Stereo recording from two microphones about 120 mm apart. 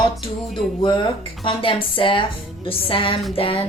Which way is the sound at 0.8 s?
40° left (ahead or behind).